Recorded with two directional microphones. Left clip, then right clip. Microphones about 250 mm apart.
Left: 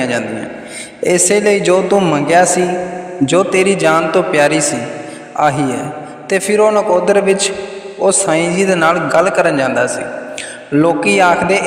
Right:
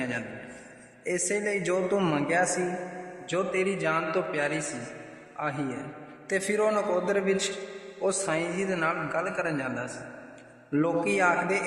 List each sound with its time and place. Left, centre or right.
1.0 s a man's voice: left